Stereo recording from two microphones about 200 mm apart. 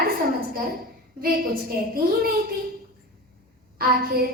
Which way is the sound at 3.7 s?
50° right (ahead or behind).